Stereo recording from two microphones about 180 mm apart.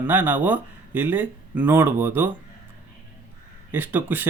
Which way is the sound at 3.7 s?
10° right (ahead or behind).